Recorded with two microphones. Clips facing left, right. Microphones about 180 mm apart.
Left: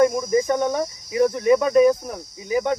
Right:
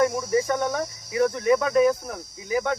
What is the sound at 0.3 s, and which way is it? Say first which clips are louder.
Cricket: left 3 dB; 15° left (ahead or behind).